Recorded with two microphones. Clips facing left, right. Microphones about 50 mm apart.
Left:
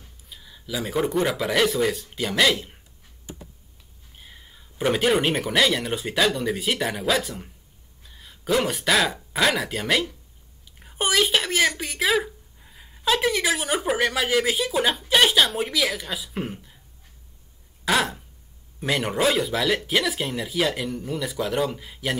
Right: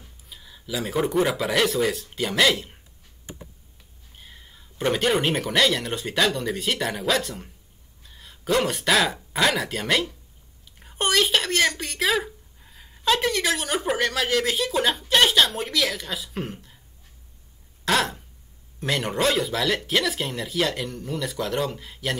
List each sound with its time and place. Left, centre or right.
0.3 s speech: centre
4.2 s speech: centre
17.8 s a sound: centre
18.8 s speech: centre